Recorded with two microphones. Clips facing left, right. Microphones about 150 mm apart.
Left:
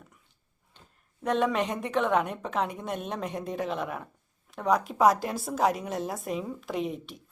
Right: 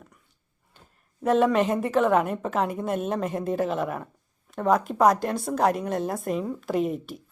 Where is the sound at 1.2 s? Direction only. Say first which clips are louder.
Right 5 dB; centre (ahead or behind).